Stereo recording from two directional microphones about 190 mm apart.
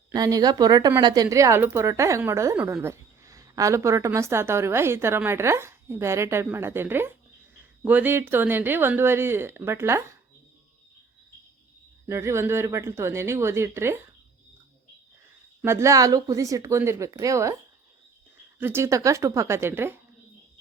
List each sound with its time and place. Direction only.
0.1 s a woman's voice: 20° right (ahead or behind)
12.0 s a woman's voice: 15° right (ahead or behind)
15.6 s a woman's voice: 15° right (ahead or behind)
18.6 s a woman's voice: 15° right (ahead or behind)